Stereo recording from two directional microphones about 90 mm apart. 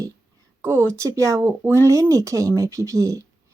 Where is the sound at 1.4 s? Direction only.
25° right (ahead or behind); by 3.2 s 40° right (ahead or behind).